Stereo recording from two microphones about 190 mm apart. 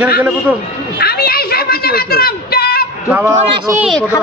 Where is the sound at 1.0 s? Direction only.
55° left (ahead or behind).